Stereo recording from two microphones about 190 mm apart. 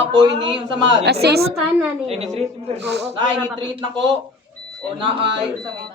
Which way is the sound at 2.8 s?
65° right (ahead or behind).